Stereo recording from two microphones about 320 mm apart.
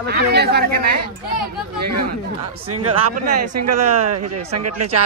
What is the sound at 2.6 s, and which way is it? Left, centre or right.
Speech, right.